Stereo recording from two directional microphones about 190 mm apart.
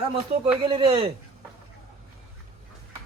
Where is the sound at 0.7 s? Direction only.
25° right (ahead or behind).